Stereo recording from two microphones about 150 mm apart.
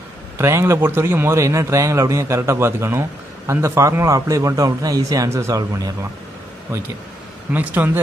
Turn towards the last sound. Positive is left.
turn(degrees=-10)  # may be behind; listen again after turning